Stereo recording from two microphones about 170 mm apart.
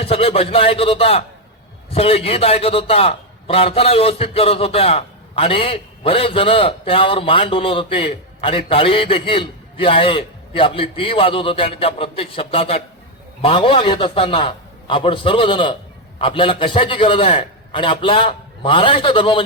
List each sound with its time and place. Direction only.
0.0 s a man's voice: 35° left (ahead or behind)